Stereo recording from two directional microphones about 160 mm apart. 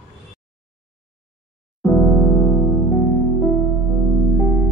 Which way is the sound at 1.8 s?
10° left (ahead or behind).